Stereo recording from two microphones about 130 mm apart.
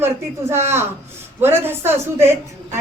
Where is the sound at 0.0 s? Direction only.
20° right (ahead or behind).